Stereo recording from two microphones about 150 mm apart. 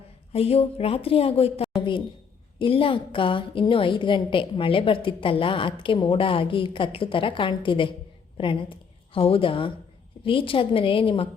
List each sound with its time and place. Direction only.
0.3 s a woman's voice: 40° left (ahead or behind)